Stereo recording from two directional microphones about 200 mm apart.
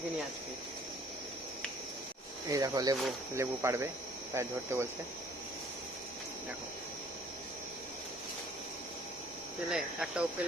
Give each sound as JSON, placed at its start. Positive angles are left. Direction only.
{"t": 2.5, "sound": "speech", "side_deg": -20}
{"t": 9.6, "sound": "speech", "side_deg": 0}